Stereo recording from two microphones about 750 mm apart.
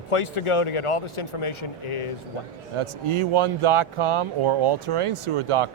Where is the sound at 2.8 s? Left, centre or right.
Right.